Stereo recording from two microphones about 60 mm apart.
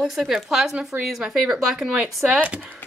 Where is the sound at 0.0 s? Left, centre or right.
Centre.